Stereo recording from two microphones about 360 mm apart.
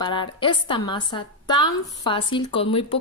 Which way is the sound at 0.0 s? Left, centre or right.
Centre.